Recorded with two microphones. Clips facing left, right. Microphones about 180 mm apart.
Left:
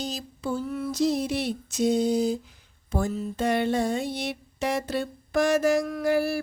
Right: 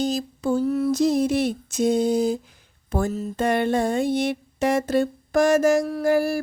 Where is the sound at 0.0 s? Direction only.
50° right (ahead or behind).